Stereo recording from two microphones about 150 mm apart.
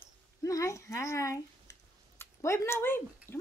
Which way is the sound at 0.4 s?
20° left (ahead or behind).